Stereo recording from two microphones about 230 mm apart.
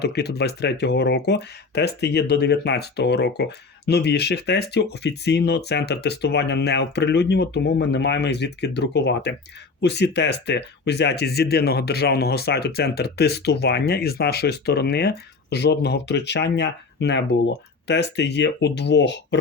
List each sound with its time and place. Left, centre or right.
0.0 s speech: left